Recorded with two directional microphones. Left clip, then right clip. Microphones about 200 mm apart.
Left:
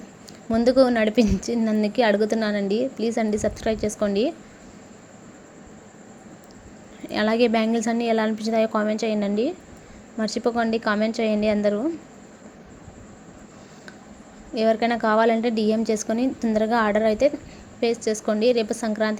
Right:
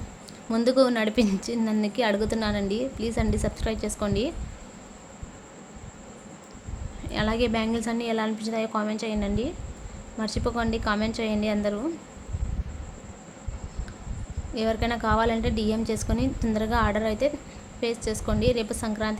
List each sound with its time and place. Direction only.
0.4 s a woman's voice: 10° left (ahead or behind)
7.1 s a woman's voice: 20° left (ahead or behind)
14.5 s a woman's voice: 20° left (ahead or behind)